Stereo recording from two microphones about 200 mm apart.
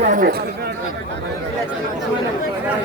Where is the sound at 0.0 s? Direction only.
40° right (ahead or behind).